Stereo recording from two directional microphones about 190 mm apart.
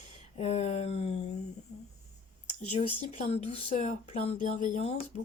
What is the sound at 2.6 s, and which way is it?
Speech, 35° left (ahead or behind).